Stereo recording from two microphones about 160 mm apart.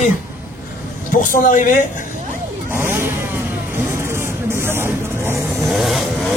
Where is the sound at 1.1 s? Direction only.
55° left (ahead or behind).